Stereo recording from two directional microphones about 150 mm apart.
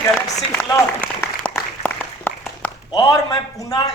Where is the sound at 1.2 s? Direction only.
10° left (ahead or behind).